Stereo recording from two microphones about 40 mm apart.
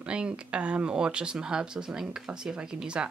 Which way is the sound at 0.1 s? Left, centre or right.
Right.